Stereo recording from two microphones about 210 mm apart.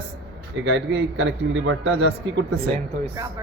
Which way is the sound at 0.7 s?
60° right (ahead or behind).